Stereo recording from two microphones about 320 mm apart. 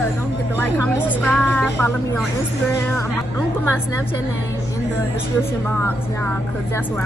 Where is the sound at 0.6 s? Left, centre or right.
Centre.